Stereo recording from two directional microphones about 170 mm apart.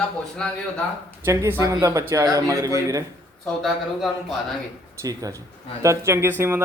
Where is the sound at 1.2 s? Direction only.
15° right (ahead or behind).